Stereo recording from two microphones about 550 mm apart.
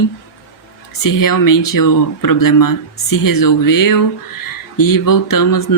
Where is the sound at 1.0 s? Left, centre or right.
Left.